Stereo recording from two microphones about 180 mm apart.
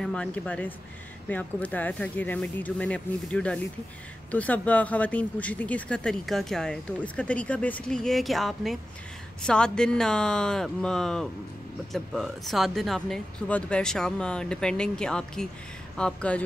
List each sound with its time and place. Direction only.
0.0 s speech: 5° left (ahead or behind)